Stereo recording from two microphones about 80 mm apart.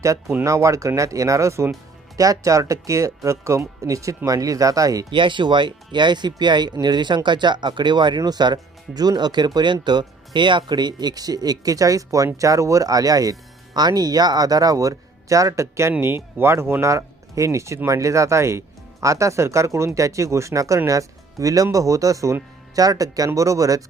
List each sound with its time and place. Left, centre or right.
0.4 s speech: right
2.1 s speech: right
5.1 s speech: right
9.8 s speech: right